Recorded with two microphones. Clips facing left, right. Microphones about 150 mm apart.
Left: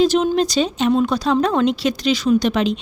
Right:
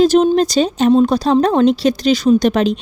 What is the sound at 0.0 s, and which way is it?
Speech, 45° right (ahead or behind).